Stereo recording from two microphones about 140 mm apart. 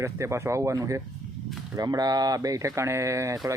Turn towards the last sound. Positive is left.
turn(degrees=-25)  # may be behind; listen again after turning